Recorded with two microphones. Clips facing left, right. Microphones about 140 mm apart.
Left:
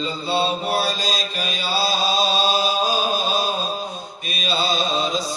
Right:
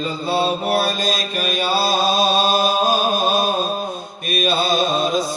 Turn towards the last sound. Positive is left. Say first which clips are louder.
# right 4 dB
turn(degrees=-55)  # may be behind; listen again after turning